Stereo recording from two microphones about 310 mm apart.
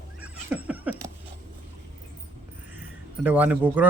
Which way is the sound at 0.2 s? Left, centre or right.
Centre.